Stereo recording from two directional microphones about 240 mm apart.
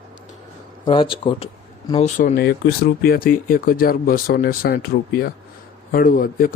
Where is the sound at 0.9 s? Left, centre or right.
Left.